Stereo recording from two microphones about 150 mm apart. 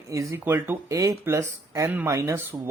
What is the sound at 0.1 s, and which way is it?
Speech, 20° right (ahead or behind).